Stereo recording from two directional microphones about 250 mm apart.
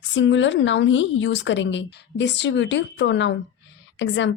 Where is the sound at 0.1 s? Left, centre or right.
Left.